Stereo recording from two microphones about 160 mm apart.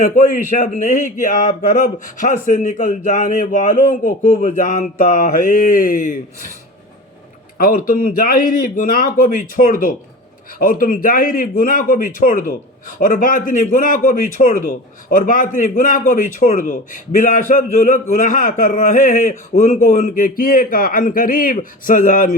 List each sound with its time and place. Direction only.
0.0 s a man's voice: 60° left (ahead or behind)
7.6 s a man's voice: 65° left (ahead or behind)